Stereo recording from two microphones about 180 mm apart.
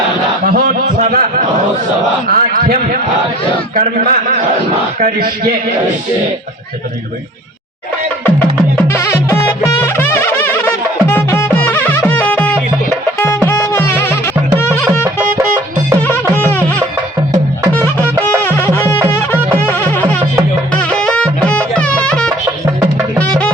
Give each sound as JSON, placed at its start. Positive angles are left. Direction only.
{"t": 0.4, "sound": "a sound", "side_deg": -55}
{"t": 0.9, "sound": "speech", "side_deg": -45}
{"t": 2.2, "sound": "a man's voice", "side_deg": -55}
{"t": 8.9, "sound": "music", "side_deg": 15}
{"t": 16.0, "sound": "music", "side_deg": 15}
{"t": 17.7, "sound": "music", "side_deg": 10}